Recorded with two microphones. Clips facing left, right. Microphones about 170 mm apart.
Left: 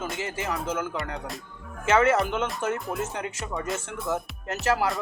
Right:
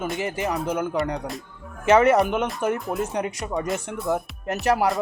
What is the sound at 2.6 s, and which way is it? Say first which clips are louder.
Speech: right 5 dB; 15° right (ahead or behind).